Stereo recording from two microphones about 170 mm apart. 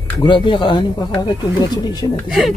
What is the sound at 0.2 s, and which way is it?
Speech, 30° left (ahead or behind).